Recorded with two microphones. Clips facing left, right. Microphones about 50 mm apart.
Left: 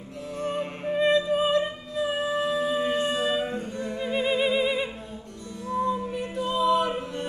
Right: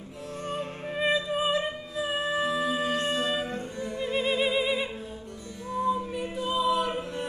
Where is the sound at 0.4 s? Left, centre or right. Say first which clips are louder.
Left 4 dB; centre.